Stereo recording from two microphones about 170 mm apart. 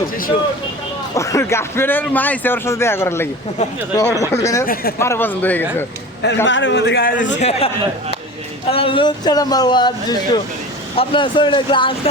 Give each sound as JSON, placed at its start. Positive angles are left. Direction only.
{"t": 1.1, "sound": "a man's voice", "side_deg": 20}
{"t": 4.6, "sound": "speech", "side_deg": 60}
{"t": 4.9, "sound": "a man's voice", "side_deg": 15}
{"t": 6.2, "sound": "a man's voice", "side_deg": 90}
{"t": 7.2, "sound": "a man's voice", "side_deg": 45}
{"t": 8.7, "sound": "speech", "side_deg": 30}